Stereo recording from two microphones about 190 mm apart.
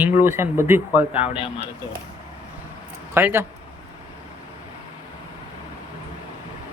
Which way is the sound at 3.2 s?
10° right (ahead or behind).